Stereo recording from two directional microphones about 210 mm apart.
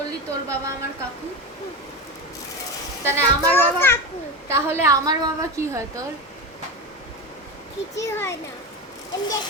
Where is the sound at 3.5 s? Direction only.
10° left (ahead or behind).